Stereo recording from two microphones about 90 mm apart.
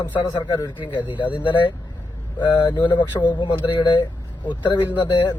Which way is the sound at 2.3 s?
55° left (ahead or behind).